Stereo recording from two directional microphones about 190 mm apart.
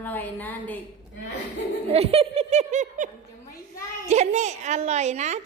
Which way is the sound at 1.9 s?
30° right (ahead or behind).